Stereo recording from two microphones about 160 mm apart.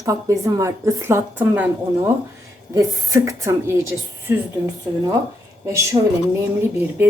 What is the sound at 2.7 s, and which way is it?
Speech, 20° right (ahead or behind).